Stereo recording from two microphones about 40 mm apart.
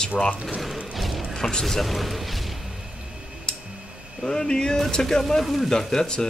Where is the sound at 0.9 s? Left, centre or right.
Centre.